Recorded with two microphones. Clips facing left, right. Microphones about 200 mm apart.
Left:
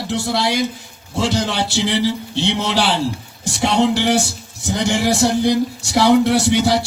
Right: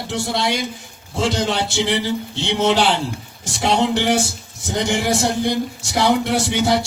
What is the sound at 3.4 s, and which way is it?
A man's voice, 65° left (ahead or behind).